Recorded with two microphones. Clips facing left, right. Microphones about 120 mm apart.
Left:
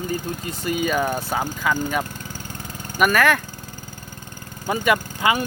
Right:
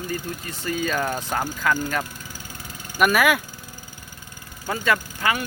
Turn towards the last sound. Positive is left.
turn(degrees=15)  # may be behind; listen again after turning